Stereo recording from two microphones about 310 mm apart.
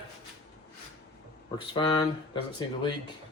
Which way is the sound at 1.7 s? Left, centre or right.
Centre.